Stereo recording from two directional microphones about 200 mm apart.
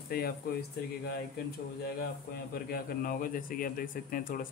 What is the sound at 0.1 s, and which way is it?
Speech, 50° left (ahead or behind).